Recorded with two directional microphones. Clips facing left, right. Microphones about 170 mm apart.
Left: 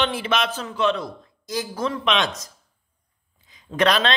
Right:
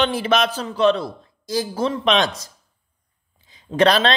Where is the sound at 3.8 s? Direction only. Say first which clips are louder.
Right 4 dB; 35° right (ahead or behind).